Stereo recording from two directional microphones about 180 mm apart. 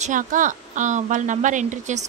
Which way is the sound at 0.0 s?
45° right (ahead or behind).